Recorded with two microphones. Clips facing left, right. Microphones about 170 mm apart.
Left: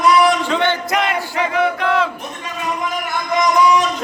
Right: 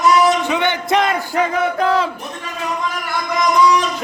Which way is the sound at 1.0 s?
40° right (ahead or behind).